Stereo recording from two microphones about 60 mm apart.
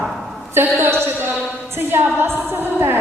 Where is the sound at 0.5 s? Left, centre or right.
Right.